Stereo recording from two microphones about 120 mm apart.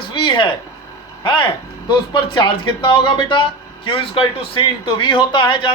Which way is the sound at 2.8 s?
40° left (ahead or behind).